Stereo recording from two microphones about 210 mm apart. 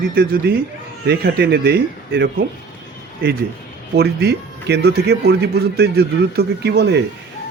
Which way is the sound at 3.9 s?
50° right (ahead or behind).